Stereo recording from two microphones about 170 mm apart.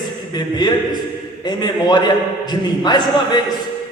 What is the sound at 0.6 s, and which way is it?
Speech, 25° left (ahead or behind).